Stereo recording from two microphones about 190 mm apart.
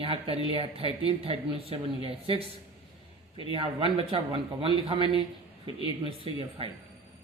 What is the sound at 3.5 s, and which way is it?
A man's voice, 30° right (ahead or behind).